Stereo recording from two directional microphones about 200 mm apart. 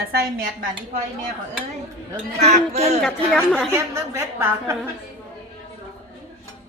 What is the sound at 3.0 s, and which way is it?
Speech, centre (ahead or behind).